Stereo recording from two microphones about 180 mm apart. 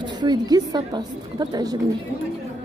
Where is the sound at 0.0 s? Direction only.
25° right (ahead or behind).